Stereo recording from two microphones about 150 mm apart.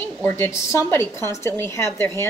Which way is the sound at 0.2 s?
15° left (ahead or behind).